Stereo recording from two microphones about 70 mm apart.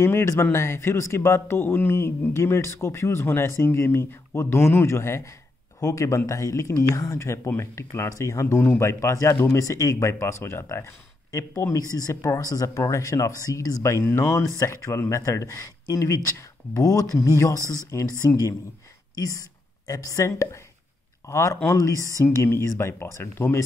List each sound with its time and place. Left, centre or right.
0.0 s speech: left
11.9 s speech: left
12.6 s speech: left
22.2 s speech: left